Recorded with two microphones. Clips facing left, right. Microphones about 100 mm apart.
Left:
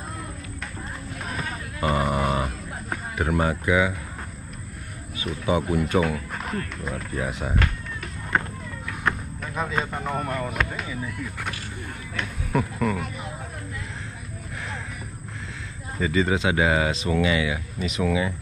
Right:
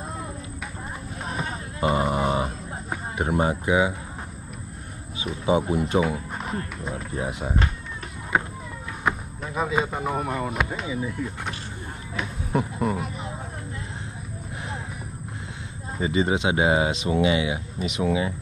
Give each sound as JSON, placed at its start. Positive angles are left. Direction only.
{"t": 1.3, "sound": "a sound", "side_deg": -25}
{"t": 3.2, "sound": "speech", "side_deg": -25}
{"t": 5.6, "sound": "speech", "side_deg": -25}
{"t": 8.3, "sound": "speech", "side_deg": -5}
{"t": 9.1, "sound": "a sound", "side_deg": -5}
{"t": 9.6, "sound": "speech", "side_deg": -5}
{"t": 12.5, "sound": "speech", "side_deg": -25}
{"t": 16.0, "sound": "speech", "side_deg": -25}